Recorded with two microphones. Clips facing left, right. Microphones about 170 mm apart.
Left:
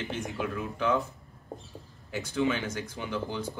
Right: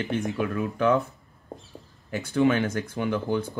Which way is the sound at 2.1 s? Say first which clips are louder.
Right 6 dB; 55° right (ahead or behind).